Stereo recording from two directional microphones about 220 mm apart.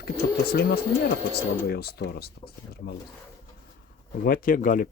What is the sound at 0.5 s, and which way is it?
Speech, 45° left (ahead or behind).